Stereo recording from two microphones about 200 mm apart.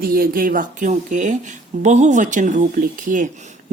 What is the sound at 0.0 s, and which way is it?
A man's voice, 45° right (ahead or behind).